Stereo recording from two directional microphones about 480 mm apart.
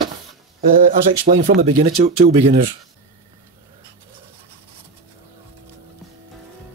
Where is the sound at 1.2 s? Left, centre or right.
Centre.